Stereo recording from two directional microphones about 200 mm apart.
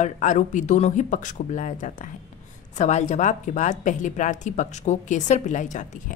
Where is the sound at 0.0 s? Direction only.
40° left (ahead or behind).